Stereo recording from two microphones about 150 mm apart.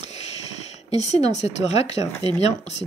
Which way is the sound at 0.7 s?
45° left (ahead or behind).